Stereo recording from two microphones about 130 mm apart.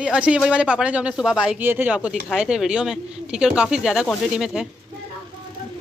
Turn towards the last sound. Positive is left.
turn(degrees=-5)  # may be behind; listen again after turning